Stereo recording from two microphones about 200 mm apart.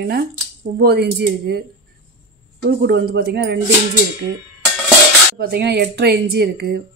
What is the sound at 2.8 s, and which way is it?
Speech, 60° right (ahead or behind).